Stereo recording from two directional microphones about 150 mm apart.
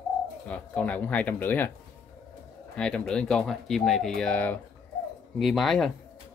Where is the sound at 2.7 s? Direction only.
5° left (ahead or behind).